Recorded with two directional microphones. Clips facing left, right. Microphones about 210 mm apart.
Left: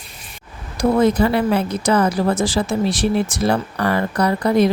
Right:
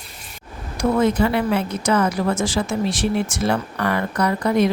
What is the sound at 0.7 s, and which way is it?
Speech, 35° left (ahead or behind).